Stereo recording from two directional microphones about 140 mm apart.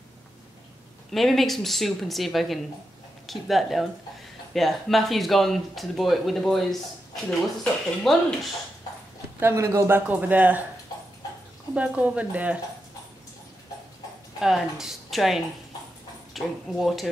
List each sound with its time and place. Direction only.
1.1 s speech: centre (ahead or behind)
9.4 s speech: 20° right (ahead or behind)
11.7 s speech: 10° right (ahead or behind)
14.4 s speech: 5° right (ahead or behind)